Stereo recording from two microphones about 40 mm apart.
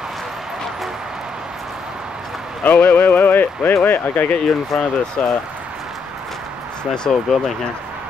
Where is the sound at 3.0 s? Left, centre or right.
Left.